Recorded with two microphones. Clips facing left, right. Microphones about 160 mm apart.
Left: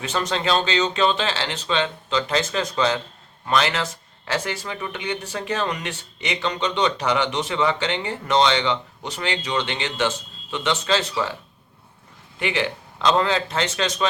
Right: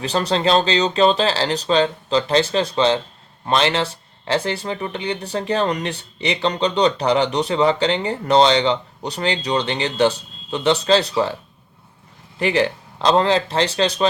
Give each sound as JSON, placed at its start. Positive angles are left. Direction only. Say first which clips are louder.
{"t": 0.0, "sound": "speech", "louder": "right 5 dB", "side_deg": -35}
{"t": 12.4, "sound": "speech", "louder": "right 6 dB", "side_deg": -35}